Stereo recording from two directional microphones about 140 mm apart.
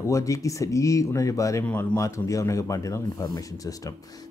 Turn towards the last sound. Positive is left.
turn(degrees=25)  # may be behind; listen again after turning